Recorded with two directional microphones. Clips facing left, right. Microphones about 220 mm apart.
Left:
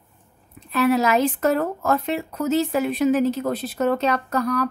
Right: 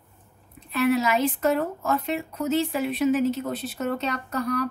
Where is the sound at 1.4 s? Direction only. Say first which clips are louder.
Left 3 dB; 75° left (ahead or behind).